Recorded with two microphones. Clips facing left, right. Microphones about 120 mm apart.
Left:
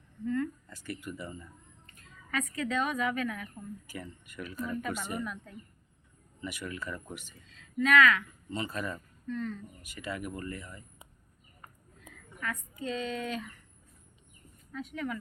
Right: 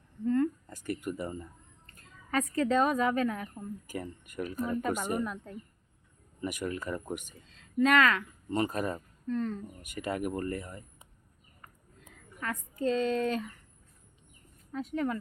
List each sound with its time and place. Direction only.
0.3 s a sound: 40° right (ahead or behind)
1.9 s a woman's voice: 40° right (ahead or behind)
3.8 s speech: 45° right (ahead or behind)
7.8 s speech: 35° right (ahead or behind)
8.4 s speech: 50° right (ahead or behind)
9.8 s speech: 50° right (ahead or behind)
12.4 s speech: 35° right (ahead or behind)
14.7 s speech: 35° right (ahead or behind)